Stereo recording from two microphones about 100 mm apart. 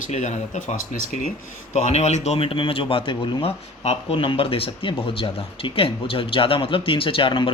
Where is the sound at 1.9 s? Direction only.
90° left.